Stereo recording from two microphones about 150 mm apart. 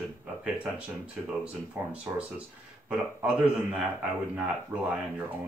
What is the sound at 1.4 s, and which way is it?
Speech, 10° right (ahead or behind).